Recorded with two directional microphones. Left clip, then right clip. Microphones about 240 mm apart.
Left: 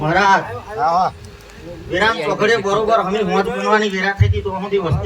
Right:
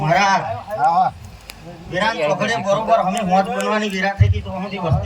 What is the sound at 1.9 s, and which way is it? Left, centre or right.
A man's voice, centre.